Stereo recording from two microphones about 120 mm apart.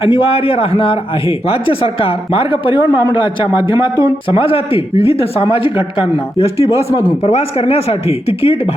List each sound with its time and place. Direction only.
0.0 s a man's voice: 50° left (ahead or behind)
4.0 s a man's voice: 45° left (ahead or behind)